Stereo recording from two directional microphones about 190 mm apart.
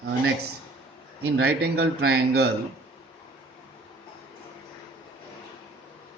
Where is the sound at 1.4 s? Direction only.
60° right (ahead or behind).